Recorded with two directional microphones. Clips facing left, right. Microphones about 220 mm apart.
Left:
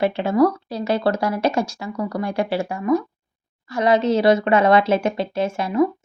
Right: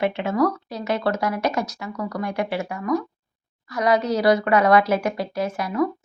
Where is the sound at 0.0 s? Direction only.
35° left (ahead or behind).